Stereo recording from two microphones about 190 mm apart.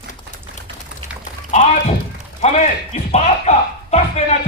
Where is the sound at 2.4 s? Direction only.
35° left (ahead or behind).